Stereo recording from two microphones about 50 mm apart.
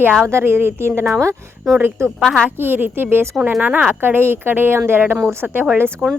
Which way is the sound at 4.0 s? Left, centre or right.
Right.